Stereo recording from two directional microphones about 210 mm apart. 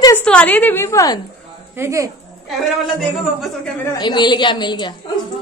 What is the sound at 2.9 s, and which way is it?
Speech, centre (ahead or behind).